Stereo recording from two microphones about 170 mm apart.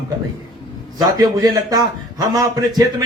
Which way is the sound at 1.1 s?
25° right (ahead or behind).